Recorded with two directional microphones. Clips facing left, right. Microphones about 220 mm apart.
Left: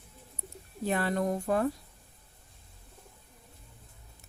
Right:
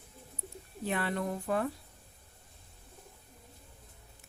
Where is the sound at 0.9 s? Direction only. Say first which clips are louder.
Left 4 dB; 40° left (ahead or behind).